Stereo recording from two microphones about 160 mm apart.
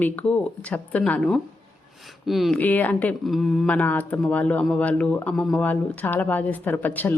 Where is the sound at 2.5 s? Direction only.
10° left (ahead or behind).